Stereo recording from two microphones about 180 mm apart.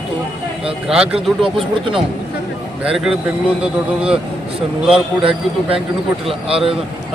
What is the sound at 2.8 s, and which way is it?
Speech, 5° right (ahead or behind).